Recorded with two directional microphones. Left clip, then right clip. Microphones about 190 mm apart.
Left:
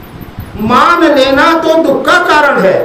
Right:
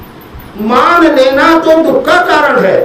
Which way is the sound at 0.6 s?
20° left (ahead or behind).